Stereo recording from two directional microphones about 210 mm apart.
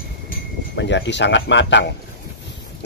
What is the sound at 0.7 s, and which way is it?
A man's voice, 55° left (ahead or behind).